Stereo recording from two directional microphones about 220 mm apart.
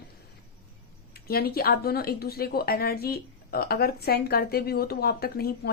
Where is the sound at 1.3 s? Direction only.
45° left (ahead or behind).